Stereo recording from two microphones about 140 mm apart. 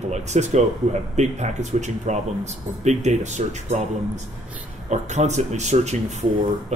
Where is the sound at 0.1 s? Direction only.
55° right (ahead or behind).